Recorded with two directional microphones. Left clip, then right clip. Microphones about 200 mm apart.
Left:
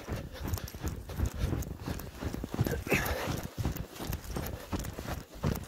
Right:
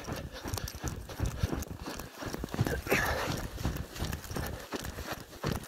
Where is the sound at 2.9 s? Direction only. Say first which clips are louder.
Right 2 dB; 25° left (ahead or behind).